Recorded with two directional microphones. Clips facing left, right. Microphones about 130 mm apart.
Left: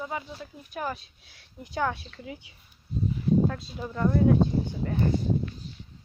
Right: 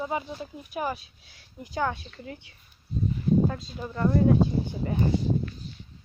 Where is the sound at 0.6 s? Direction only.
10° right (ahead or behind).